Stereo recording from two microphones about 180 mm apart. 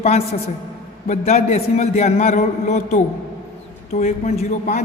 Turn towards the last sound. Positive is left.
turn(degrees=40)  # may be behind; listen again after turning